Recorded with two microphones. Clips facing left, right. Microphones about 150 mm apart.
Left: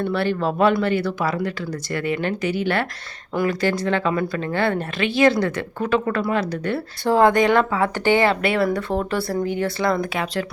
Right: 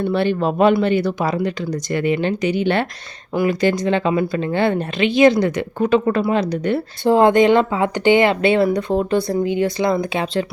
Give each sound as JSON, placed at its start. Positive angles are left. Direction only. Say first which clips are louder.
{"t": 0.0, "sound": "speech", "louder": "right 3 dB", "side_deg": -20}